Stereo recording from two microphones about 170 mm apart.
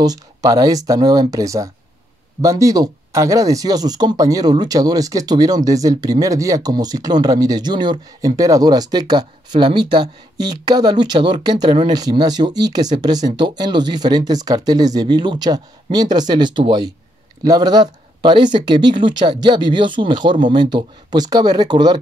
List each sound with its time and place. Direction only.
0.0 s speech: 20° right (ahead or behind)